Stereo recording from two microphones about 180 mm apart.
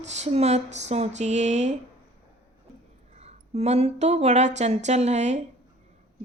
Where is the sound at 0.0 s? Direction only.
35° right (ahead or behind).